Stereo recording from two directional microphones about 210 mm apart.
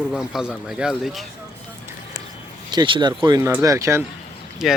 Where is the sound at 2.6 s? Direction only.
20° right (ahead or behind).